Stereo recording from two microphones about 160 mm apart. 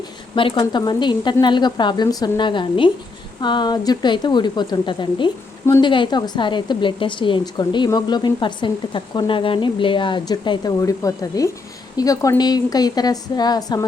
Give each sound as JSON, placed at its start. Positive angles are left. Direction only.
{"t": 0.3, "sound": "a woman's voice", "side_deg": 35}